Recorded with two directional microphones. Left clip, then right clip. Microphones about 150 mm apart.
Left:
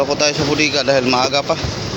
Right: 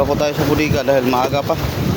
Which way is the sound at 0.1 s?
20° right (ahead or behind).